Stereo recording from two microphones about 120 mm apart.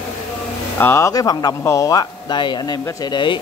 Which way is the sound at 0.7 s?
20° left (ahead or behind).